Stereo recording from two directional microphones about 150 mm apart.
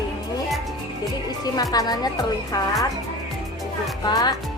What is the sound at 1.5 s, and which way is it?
Speech, 25° left (ahead or behind).